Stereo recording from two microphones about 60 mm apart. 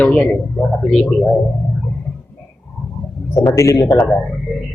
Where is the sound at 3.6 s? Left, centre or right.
Left.